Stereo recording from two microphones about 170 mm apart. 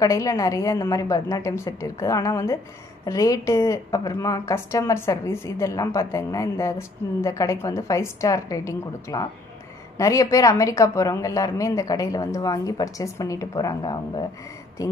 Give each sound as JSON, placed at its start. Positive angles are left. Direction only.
{"t": 0.0, "sound": "a woman's voice", "side_deg": 20}